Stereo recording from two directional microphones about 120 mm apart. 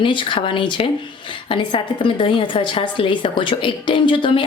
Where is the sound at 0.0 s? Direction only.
45° left (ahead or behind).